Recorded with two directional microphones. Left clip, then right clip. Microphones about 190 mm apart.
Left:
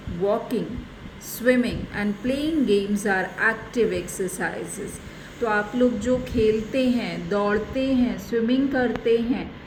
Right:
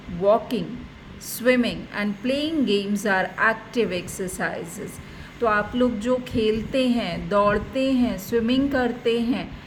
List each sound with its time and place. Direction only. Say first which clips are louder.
1.4 s a woman's voice: right 1 dB; 40° right (ahead or behind)